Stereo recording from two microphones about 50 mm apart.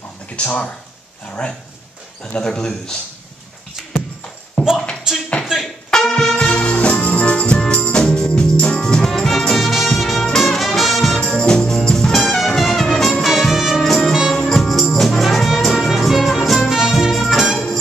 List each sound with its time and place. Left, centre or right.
0.4 s speech: left
2.3 s speech: centre
4.6 s a sound: left
5.4 s music: centre
5.9 s brass instrument: centre
6.4 s music: centre
13.2 s music: centre